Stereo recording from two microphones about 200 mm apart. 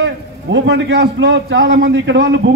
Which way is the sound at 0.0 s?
65° right (ahead or behind).